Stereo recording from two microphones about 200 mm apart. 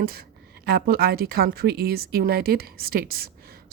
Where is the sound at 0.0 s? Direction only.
50° right (ahead or behind).